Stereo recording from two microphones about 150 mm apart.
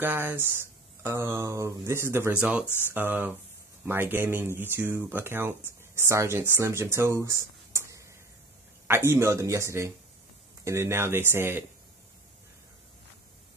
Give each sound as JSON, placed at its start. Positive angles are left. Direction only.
{"t": 0.0, "sound": "a man's voice", "side_deg": -15}